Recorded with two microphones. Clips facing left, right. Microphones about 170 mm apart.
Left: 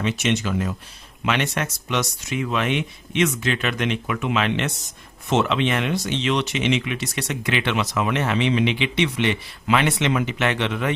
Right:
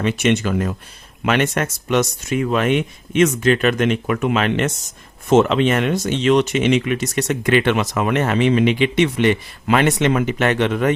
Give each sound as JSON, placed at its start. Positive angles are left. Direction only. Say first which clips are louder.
{"t": 0.0, "sound": "speech", "louder": "right 5 dB", "side_deg": -55}